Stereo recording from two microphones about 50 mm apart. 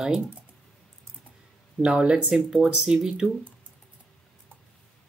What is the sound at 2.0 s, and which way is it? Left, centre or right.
Speech, centre.